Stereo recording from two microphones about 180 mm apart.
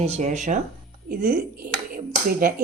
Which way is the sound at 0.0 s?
40° right (ahead or behind).